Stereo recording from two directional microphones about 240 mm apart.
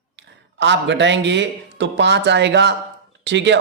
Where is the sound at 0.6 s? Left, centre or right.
Right.